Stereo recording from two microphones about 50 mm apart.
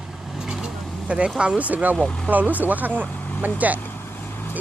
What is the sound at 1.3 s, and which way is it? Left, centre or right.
Speech, right.